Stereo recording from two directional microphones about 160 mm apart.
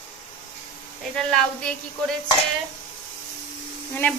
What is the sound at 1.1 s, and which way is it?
Speech, 5° left (ahead or behind).